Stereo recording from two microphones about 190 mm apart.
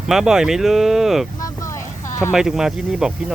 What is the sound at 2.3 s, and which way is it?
Speech, 5° right (ahead or behind).